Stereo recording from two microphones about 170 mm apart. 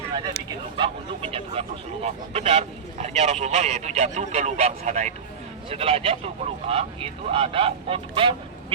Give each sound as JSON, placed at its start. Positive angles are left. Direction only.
{"t": 0.8, "sound": "speech", "side_deg": -35}